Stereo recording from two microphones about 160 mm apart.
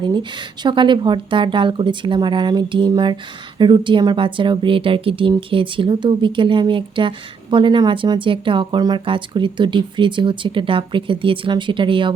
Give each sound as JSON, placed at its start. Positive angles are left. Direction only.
{"t": 0.0, "sound": "speech", "side_deg": -30}